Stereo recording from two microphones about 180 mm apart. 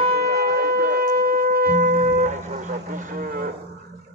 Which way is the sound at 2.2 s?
45° right (ahead or behind).